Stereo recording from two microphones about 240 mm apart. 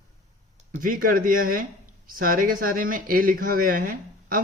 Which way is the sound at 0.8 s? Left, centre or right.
Right.